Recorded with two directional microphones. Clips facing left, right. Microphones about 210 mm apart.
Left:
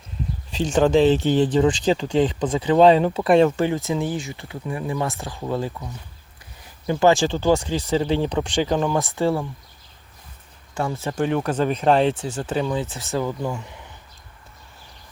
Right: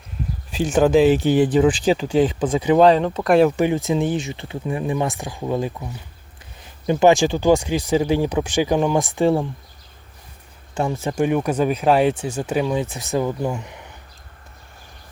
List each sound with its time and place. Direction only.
0.5 s speech: 10° right (ahead or behind)
2.8 s speech: 5° left (ahead or behind)
3.6 s speech: 15° right (ahead or behind)
10.8 s speech: 15° right (ahead or behind)